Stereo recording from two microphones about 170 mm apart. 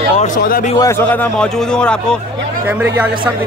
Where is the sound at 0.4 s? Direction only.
60° left (ahead or behind).